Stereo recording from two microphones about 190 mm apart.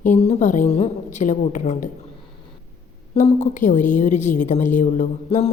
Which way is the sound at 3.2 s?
40° left (ahead or behind).